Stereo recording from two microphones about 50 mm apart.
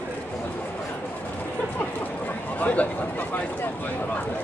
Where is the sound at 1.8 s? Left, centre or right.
Left.